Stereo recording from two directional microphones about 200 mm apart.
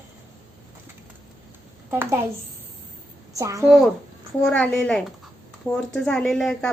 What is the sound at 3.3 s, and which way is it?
Speech, 15° right (ahead or behind).